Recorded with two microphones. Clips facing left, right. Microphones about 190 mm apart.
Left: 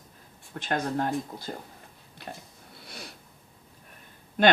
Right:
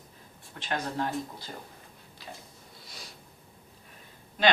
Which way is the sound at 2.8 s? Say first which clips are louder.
Left 6 dB; 60° left (ahead or behind).